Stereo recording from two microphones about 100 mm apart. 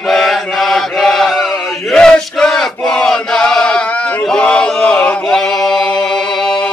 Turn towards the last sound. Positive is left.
turn(degrees=10)  # may be behind; listen again after turning